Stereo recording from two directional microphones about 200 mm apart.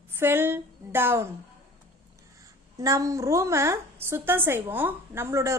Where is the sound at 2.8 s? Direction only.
15° right (ahead or behind).